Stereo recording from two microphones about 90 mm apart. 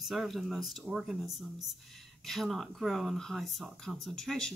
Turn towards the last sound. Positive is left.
turn(degrees=5)  # may be behind; listen again after turning